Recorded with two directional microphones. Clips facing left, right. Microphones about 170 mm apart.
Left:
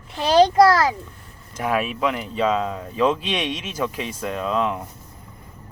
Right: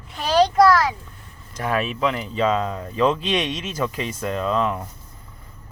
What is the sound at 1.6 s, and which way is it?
Speech, 10° left (ahead or behind).